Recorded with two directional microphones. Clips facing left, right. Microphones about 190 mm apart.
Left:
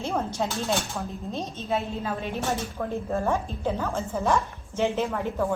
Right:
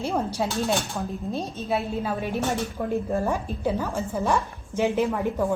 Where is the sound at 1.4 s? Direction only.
10° right (ahead or behind).